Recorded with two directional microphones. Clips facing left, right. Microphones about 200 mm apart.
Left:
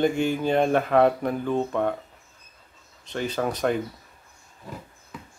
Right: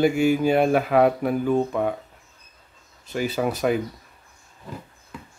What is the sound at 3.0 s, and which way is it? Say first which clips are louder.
Speech: right 3 dB; 10° right (ahead or behind).